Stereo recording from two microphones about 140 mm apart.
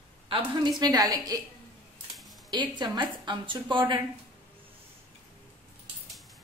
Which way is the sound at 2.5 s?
35° right (ahead or behind).